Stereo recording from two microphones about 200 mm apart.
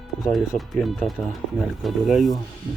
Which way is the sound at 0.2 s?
Centre (ahead or behind).